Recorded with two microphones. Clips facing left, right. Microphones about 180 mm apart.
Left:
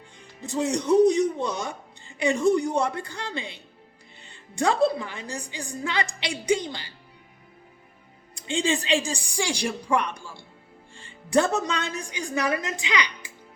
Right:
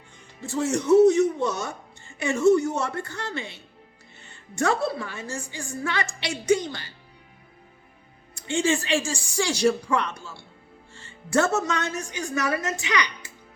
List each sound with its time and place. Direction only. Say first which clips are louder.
0.4 s speech: right 1 dB; 15° left (ahead or behind)
8.4 s a woman's voice: right 2 dB; 15° left (ahead or behind)